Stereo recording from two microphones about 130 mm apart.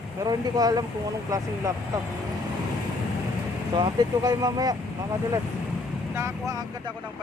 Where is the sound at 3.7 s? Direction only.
35° right (ahead or behind).